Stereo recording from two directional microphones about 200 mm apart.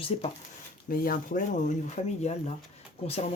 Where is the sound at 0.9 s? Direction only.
45° left (ahead or behind).